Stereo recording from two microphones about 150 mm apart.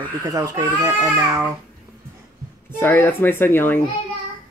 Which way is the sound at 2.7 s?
15° left (ahead or behind).